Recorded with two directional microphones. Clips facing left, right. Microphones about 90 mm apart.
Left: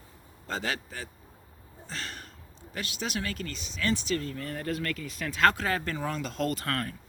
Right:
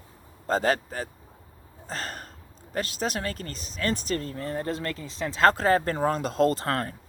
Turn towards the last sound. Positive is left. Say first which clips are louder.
# right 6 dB
turn(degrees=-30)  # may be behind; listen again after turning